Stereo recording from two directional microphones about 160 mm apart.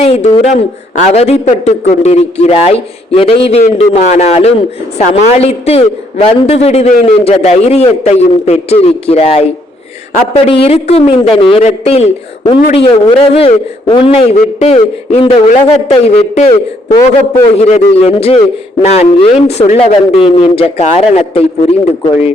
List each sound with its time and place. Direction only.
0.0 s a man's voice: 40° left (ahead or behind)
10.5 s a man's voice: 40° left (ahead or behind)
17.6 s a man's voice: 40° left (ahead or behind)